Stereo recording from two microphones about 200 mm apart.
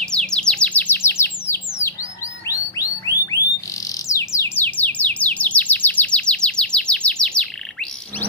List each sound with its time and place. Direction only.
0.0 s chirp: 5° left (ahead or behind)
2.4 s a sound: 15° left (ahead or behind)
4.1 s bird: 15° left (ahead or behind)